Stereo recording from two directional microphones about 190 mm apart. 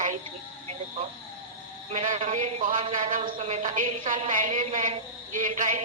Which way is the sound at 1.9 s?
35° right (ahead or behind).